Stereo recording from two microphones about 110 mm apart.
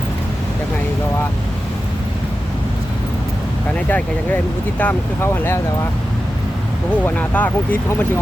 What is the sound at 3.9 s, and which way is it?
Speech, 15° left (ahead or behind).